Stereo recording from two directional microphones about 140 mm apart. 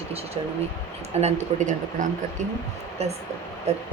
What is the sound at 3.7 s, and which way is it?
Speech, 50° right (ahead or behind).